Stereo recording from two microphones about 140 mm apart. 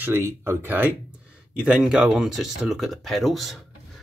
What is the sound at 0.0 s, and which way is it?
Speech, 20° right (ahead or behind).